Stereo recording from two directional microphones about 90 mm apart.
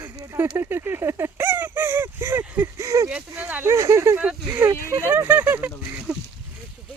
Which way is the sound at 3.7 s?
35° right (ahead or behind).